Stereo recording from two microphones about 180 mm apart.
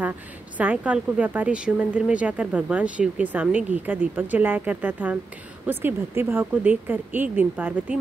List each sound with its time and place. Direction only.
0.6 s speech: 10° right (ahead or behind)